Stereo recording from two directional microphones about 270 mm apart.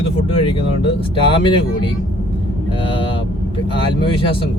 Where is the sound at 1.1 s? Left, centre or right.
Centre.